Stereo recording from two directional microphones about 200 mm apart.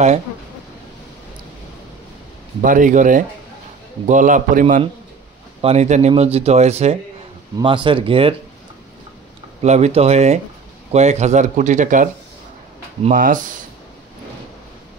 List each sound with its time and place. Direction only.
2.6 s speech: 40° right (ahead or behind)
9.6 s speech: 35° right (ahead or behind)